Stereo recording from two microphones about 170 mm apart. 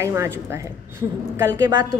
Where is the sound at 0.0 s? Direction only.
15° right (ahead or behind).